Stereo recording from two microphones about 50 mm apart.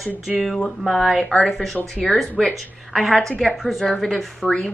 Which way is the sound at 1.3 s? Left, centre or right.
Centre.